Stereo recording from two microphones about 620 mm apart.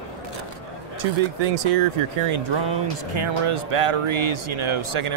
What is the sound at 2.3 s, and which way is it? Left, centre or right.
Speech, right.